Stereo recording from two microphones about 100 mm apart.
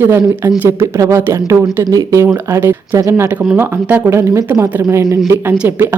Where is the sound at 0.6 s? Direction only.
25° right (ahead or behind).